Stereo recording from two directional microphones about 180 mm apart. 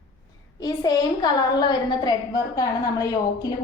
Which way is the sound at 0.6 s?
20° left (ahead or behind).